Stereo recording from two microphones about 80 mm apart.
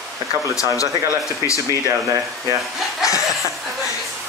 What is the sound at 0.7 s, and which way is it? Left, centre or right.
Speech, left.